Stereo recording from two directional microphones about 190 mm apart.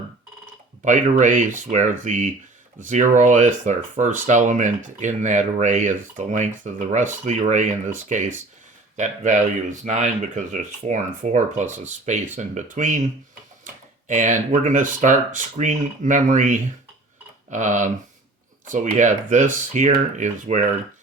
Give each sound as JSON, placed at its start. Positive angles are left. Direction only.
{"t": 0.9, "sound": "speech", "side_deg": -40}
{"t": 14.1, "sound": "speech", "side_deg": -40}